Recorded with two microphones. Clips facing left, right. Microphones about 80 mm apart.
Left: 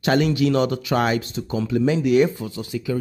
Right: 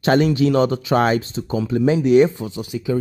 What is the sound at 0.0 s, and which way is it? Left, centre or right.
Speech, right.